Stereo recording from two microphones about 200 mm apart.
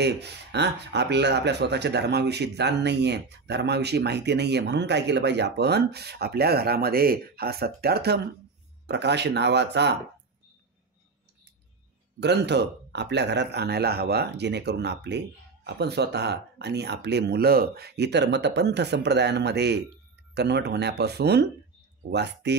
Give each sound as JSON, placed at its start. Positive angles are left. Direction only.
{"t": 0.0, "sound": "speech", "side_deg": -55}
{"t": 12.2, "sound": "speech", "side_deg": -60}